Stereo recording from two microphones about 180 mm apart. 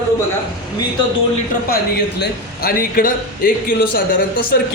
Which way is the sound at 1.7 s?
60° left (ahead or behind).